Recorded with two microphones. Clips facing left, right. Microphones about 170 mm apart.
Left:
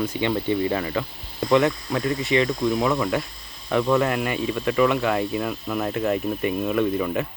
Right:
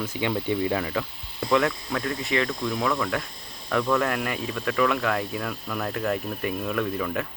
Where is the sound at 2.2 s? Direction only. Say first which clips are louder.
Left 5 dB; centre (ahead or behind).